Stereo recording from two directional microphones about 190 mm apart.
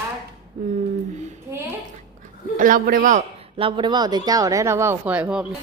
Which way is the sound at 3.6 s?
25° right (ahead or behind).